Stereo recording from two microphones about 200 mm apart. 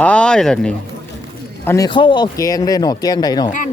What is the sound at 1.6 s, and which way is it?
Speech, 15° left (ahead or behind).